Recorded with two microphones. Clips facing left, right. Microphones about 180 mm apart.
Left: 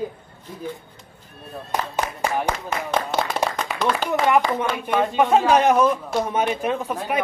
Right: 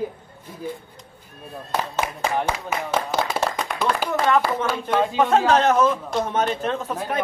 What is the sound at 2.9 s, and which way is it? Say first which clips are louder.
Clapping: left 1 dB; 5° right (ahead or behind).